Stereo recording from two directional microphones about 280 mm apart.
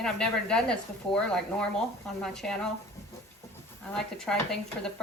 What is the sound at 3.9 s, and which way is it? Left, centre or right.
Speech, centre.